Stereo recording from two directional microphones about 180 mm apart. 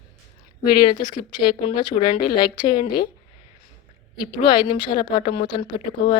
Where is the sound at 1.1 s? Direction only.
25° left (ahead or behind).